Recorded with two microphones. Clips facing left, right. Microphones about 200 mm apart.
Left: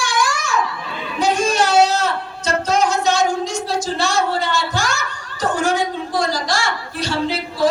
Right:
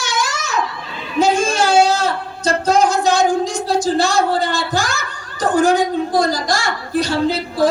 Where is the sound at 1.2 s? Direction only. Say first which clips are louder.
Right 2 dB; 25° right (ahead or behind).